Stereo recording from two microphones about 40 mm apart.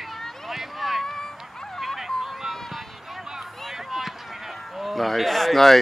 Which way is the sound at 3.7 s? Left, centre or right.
Centre.